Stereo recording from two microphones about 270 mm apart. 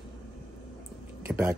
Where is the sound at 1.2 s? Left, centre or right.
Centre.